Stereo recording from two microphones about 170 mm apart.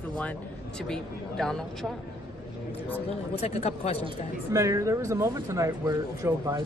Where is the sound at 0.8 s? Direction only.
5° left (ahead or behind).